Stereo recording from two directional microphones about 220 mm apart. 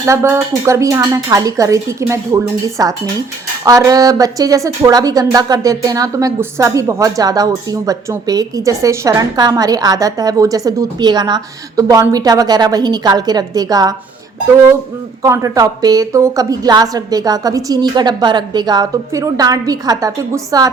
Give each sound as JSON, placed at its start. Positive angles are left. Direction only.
{"t": 0.0, "sound": "speech", "side_deg": -10}
{"t": 15.2, "sound": "speech", "side_deg": -15}